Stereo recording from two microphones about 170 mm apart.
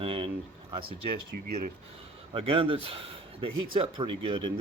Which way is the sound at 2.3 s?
35° right (ahead or behind).